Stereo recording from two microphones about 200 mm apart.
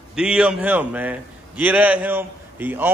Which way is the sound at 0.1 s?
5° right (ahead or behind).